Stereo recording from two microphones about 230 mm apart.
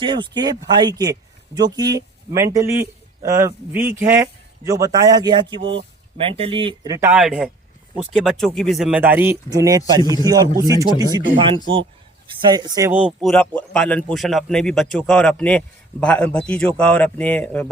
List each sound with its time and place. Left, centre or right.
0.0 s speech: right
7.1 s speech: centre